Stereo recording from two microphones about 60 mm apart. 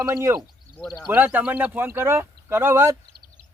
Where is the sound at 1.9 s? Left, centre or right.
Right.